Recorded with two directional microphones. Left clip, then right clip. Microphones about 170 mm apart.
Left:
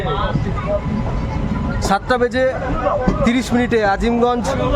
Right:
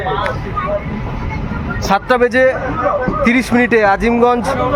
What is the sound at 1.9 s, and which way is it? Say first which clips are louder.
Speech: right 4 dB; 5° right (ahead or behind).